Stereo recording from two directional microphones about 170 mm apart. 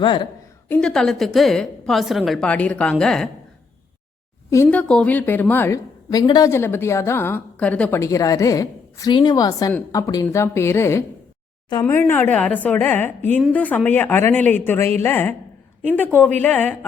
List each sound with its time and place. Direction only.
0.0 s a woman's voice: 30° left (ahead or behind)
0.7 s a woman's voice: 5° left (ahead or behind)
4.5 s a woman's voice: 10° left (ahead or behind)